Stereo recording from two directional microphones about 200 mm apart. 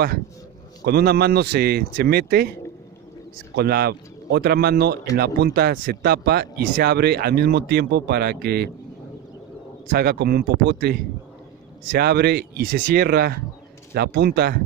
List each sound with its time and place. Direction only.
0.8 s speech: 50° right (ahead or behind)
3.5 s speech: 50° right (ahead or behind)
9.8 s speech: 55° right (ahead or behind)